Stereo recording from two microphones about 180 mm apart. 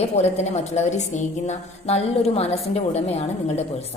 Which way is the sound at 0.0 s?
40° left (ahead or behind).